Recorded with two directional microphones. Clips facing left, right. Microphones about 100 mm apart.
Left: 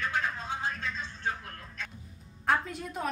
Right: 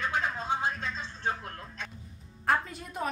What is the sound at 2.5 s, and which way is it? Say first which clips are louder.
Music: even; centre (ahead or behind).